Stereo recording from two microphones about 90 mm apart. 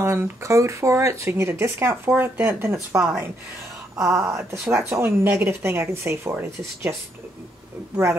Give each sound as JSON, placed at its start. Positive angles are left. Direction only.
{"t": 0.0, "sound": "speech", "side_deg": -30}
{"t": 7.9, "sound": "speech", "side_deg": -30}